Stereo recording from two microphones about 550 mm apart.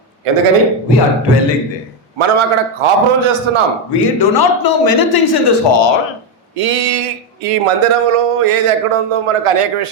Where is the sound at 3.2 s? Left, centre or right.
Right.